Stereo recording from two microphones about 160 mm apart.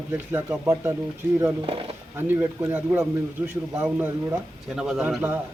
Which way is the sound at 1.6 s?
35° right (ahead or behind).